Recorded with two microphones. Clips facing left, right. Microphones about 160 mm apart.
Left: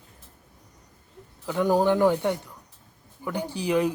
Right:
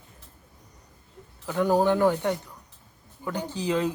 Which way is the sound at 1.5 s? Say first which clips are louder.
Even; 15° left (ahead or behind).